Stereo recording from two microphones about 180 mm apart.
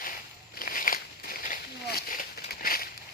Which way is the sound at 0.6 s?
50° left (ahead or behind).